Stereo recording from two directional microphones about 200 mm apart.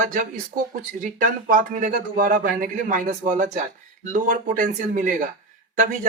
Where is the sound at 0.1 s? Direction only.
40° right (ahead or behind).